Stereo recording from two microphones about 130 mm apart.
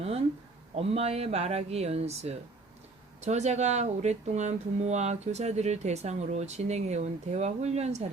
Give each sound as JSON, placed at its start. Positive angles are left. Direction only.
{"t": 0.8, "sound": "speech", "side_deg": -50}